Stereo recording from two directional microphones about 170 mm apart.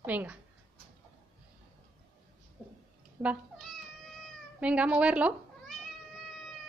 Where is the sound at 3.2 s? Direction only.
20° right (ahead or behind).